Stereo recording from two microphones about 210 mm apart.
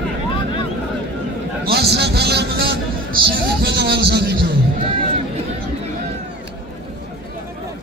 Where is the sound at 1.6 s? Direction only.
50° right (ahead or behind).